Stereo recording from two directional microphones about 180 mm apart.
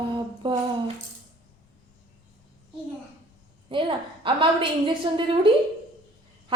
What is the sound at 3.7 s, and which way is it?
A woman's voice, 30° right (ahead or behind).